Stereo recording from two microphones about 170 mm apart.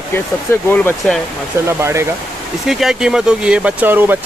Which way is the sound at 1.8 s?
15° right (ahead or behind).